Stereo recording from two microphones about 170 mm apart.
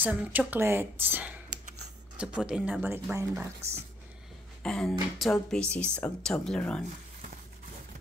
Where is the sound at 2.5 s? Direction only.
10° right (ahead or behind).